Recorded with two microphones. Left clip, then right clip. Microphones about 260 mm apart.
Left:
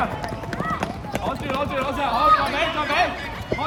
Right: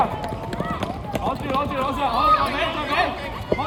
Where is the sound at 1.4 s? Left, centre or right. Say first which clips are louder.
Even; right.